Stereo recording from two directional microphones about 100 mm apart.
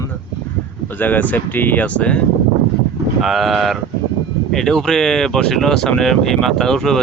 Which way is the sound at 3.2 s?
Centre (ahead or behind).